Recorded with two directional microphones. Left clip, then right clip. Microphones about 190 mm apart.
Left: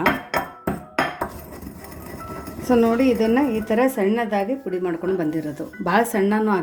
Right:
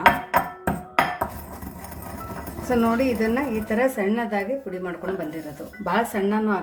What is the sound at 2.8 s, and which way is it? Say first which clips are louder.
A woman's voice: left 4 dB; 30° left (ahead or behind).